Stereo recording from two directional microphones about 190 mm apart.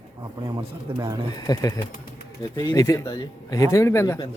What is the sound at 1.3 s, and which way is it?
Speech, 20° left (ahead or behind).